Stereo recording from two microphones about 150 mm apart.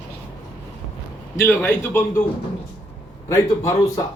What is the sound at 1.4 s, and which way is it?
Speech, 15° left (ahead or behind).